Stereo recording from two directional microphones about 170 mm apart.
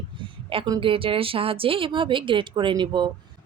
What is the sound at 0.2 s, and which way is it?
A woman's voice, 25° right (ahead or behind).